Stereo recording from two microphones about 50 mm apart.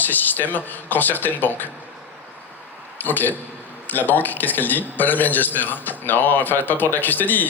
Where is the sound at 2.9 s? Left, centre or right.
Left.